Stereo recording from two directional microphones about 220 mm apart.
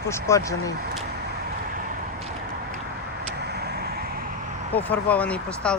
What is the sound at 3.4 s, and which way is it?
Vehicle, 45° right (ahead or behind).